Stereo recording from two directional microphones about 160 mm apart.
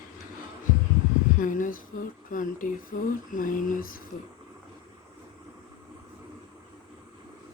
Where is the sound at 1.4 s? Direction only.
55° left (ahead or behind).